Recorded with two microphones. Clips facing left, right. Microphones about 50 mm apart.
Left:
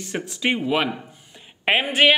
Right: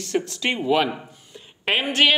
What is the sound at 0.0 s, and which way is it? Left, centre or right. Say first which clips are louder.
Speech: right 1 dB; centre.